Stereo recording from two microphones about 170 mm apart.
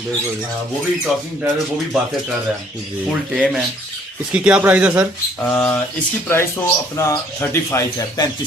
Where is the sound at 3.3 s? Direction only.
Centre (ahead or behind).